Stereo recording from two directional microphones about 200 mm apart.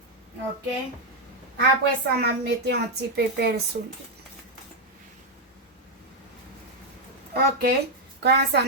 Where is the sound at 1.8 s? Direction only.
55° right (ahead or behind).